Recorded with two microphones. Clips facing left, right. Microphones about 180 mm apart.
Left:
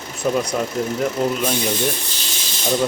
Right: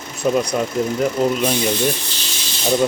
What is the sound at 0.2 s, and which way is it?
Speech, 5° right (ahead or behind).